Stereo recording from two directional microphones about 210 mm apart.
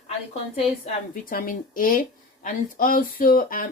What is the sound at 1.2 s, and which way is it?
Speech, 40° left (ahead or behind).